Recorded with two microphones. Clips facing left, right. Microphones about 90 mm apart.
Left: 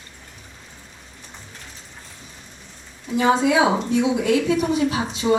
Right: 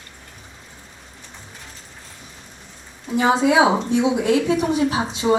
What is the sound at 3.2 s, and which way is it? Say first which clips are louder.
Speech: right 1 dB; 25° right (ahead or behind).